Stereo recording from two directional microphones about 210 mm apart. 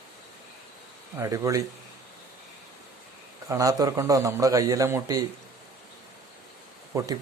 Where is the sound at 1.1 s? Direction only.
15° right (ahead or behind).